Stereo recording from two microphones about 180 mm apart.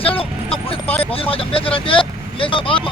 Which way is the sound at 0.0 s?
30° left (ahead or behind).